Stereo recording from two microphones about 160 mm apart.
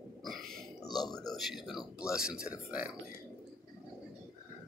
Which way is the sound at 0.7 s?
25° left (ahead or behind).